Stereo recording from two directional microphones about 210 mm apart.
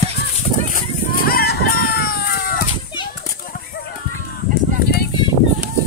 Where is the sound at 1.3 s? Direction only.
45° left (ahead or behind).